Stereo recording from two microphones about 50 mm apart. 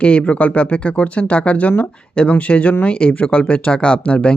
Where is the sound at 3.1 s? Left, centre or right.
Left.